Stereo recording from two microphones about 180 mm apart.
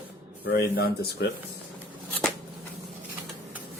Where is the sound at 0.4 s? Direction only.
65° left (ahead or behind).